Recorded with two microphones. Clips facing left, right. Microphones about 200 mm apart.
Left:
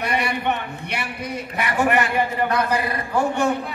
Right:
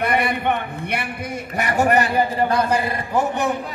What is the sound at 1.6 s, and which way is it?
A man's voice, 40° right (ahead or behind).